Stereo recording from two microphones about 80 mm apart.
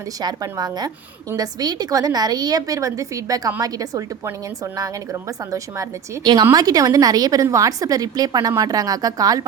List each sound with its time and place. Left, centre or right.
0.2 s a woman's voice: right
6.4 s a woman's voice: right